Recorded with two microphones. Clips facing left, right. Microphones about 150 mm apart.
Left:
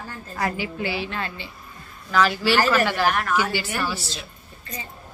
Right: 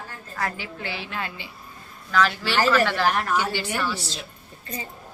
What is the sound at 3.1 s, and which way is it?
Speech, 30° right (ahead or behind).